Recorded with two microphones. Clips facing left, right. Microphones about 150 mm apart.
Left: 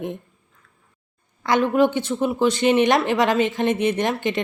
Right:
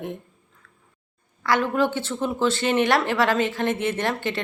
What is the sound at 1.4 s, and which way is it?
Speech, 20° left (ahead or behind).